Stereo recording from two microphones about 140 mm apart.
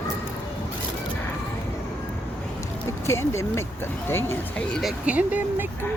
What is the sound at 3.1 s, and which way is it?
Speech, 20° left (ahead or behind).